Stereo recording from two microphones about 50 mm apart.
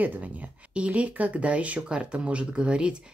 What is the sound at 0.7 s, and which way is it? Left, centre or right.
Speech, right.